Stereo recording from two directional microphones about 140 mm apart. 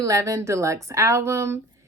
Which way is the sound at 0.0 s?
25° right (ahead or behind).